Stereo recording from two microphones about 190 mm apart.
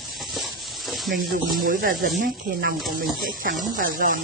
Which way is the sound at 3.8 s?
45° right (ahead or behind).